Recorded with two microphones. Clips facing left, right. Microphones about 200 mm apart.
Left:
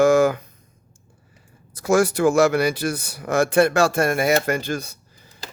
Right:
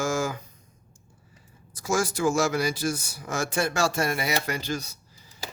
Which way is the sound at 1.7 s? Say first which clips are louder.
Left 8 dB; 60° left (ahead or behind).